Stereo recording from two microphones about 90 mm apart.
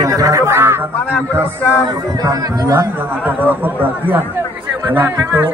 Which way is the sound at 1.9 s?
45° right (ahead or behind).